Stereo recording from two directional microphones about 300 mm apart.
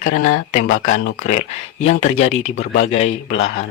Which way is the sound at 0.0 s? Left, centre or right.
Left.